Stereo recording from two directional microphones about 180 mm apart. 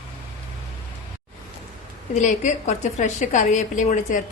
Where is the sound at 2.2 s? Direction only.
45° left (ahead or behind).